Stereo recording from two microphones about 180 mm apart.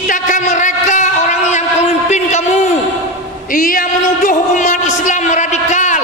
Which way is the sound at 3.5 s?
50° left (ahead or behind).